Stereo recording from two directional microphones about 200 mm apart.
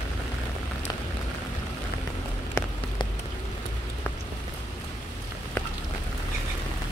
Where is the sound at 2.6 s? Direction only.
15° left (ahead or behind).